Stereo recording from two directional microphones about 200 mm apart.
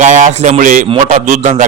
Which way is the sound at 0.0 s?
40° right (ahead or behind).